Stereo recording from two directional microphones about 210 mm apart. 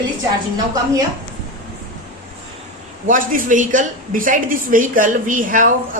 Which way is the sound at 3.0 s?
40° right (ahead or behind).